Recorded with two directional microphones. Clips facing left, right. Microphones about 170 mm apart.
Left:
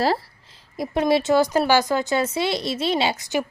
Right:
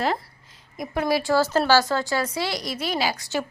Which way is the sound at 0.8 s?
25° left (ahead or behind).